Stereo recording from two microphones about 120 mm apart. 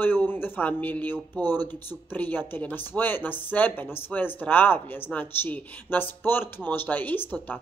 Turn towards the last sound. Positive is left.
turn(degrees=15)  # may be behind; listen again after turning